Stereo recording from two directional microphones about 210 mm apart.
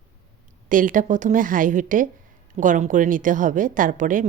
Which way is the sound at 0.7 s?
40° right (ahead or behind).